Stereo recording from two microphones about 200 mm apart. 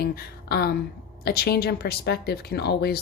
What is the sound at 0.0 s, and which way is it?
Speech, 50° left (ahead or behind).